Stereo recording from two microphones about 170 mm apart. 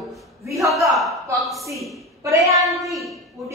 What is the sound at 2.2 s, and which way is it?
Child singing, 15° right (ahead or behind).